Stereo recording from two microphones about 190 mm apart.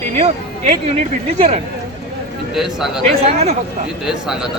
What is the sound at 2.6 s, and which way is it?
Speech, centre (ahead or behind).